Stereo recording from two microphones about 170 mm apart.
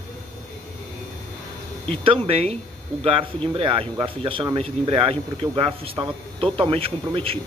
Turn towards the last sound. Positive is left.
turn(degrees=-35)  # may be behind; listen again after turning